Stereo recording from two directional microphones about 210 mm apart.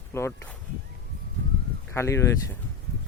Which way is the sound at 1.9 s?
15° left (ahead or behind).